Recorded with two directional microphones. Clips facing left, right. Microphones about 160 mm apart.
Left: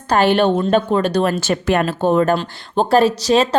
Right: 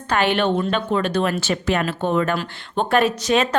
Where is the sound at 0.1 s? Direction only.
35° left (ahead or behind).